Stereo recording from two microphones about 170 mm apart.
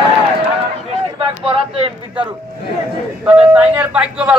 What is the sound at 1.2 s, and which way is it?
Speech, 30° right (ahead or behind).